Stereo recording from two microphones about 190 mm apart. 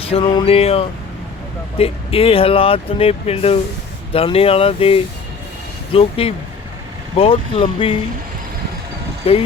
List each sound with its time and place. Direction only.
0.0 s speech: 30° left (ahead or behind)
9.2 s speech: 30° left (ahead or behind)